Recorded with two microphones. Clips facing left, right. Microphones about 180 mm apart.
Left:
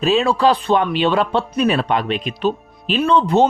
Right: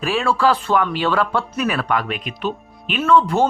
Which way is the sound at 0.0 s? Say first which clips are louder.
Left 3 dB; 20° left (ahead or behind).